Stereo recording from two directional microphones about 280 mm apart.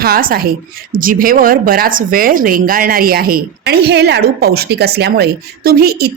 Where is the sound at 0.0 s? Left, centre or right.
Right.